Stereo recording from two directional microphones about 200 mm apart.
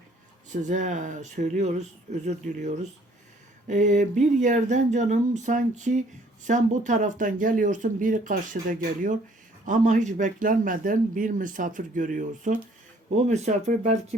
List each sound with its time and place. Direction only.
0.5 s speech: 40° right (ahead or behind)